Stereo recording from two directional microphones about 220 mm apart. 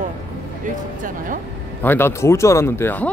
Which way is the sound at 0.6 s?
40° right (ahead or behind).